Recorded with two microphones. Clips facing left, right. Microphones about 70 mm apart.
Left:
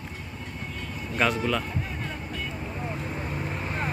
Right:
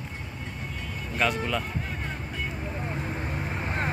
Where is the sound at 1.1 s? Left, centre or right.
Centre.